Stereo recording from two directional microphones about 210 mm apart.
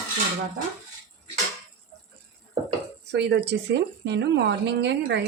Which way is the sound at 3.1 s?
55° right (ahead or behind).